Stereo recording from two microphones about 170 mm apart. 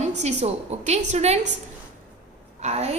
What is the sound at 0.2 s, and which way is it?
A woman's voice, 40° right (ahead or behind).